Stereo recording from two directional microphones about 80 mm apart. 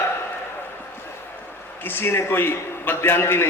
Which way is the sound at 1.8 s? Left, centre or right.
Left.